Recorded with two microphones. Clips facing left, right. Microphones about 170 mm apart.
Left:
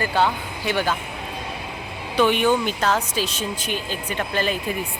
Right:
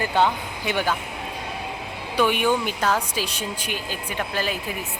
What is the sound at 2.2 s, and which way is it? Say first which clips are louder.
Speech: left 2 dB; 10° right (ahead or behind).